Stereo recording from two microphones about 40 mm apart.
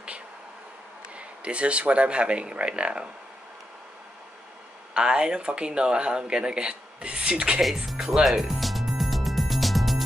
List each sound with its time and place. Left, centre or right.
1.1 s speech: right
4.9 s speech: right
7.7 s music: centre